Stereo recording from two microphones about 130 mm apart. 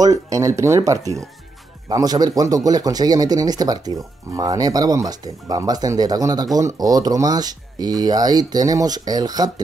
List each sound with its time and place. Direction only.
0.0 s speech: 25° right (ahead or behind)